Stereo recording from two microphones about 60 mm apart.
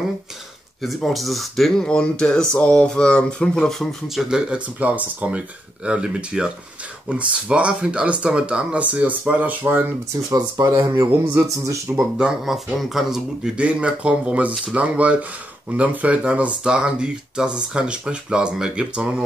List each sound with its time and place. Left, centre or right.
0.8 s speech: centre
1.9 s speech: centre
4.1 s speech: centre
4.7 s speech: right
11.3 s speech: right
12.0 s speech: centre
13.6 s speech: centre